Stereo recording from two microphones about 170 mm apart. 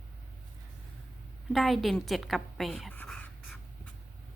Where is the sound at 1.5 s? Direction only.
Centre (ahead or behind).